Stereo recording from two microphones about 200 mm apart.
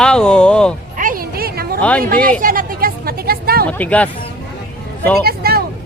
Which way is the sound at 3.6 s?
5° left (ahead or behind).